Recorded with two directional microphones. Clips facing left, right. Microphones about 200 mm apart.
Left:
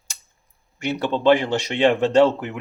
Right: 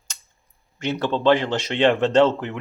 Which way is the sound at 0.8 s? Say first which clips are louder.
Even; 10° left (ahead or behind).